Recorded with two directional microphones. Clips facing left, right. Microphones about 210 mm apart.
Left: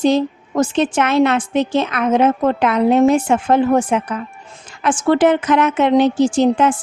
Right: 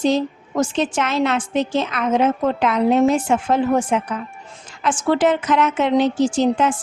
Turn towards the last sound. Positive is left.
turn(degrees=55)  # may be behind; listen again after turning